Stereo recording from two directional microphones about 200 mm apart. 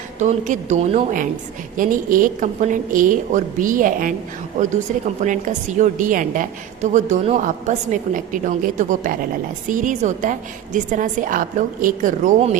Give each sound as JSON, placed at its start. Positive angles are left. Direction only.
{"t": 0.2, "sound": "a woman's voice", "side_deg": -35}